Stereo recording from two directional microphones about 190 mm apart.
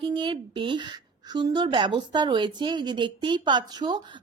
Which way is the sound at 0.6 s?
25° right (ahead or behind).